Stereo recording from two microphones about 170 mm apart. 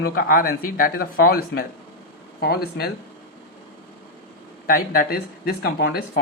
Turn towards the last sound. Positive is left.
turn(degrees=70)  # may be behind; listen again after turning